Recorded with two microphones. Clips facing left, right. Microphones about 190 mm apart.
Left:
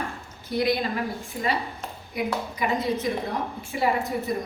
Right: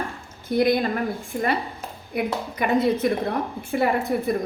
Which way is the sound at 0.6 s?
55° right (ahead or behind).